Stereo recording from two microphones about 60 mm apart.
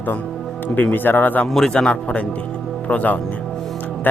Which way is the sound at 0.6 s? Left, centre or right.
Left.